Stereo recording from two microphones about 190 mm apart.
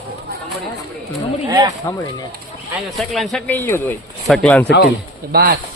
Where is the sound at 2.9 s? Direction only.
Centre (ahead or behind).